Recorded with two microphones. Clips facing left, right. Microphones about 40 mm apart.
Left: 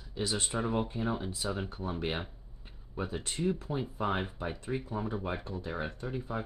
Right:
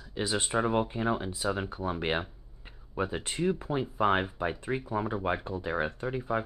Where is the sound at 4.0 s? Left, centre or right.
Right.